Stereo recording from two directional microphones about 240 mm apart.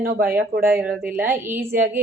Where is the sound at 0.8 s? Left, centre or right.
Centre.